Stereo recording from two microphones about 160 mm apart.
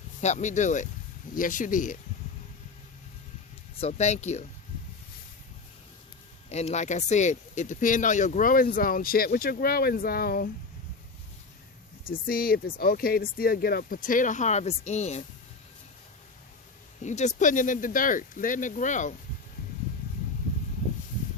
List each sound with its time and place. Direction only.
0.2 s speech: 45° left (ahead or behind)
3.8 s speech: 40° left (ahead or behind)
6.5 s speech: 45° left (ahead or behind); by 10.5 s 70° left (ahead or behind)
12.0 s speech: 65° left (ahead or behind); by 15.2 s 45° left (ahead or behind)
17.0 s speech: 50° left (ahead or behind)